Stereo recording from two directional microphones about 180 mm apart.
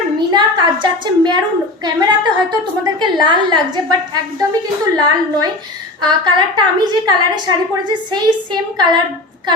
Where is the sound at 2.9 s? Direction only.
25° right (ahead or behind).